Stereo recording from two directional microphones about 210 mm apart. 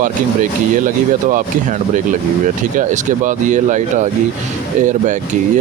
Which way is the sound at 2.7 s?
35° right (ahead or behind).